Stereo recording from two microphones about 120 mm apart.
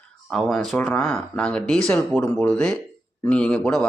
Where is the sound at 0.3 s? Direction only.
Centre (ahead or behind).